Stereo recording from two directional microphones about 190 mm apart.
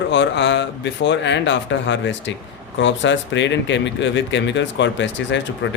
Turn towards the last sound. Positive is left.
turn(degrees=70)  # may be behind; listen again after turning